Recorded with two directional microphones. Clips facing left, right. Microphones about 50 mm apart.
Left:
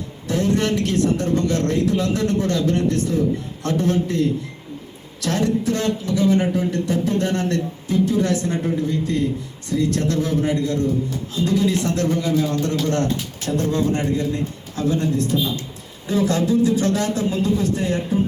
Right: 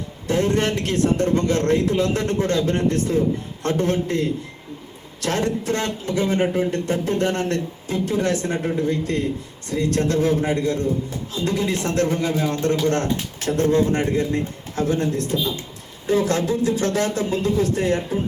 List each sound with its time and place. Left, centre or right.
0.3 s speech: right
5.2 s speech: right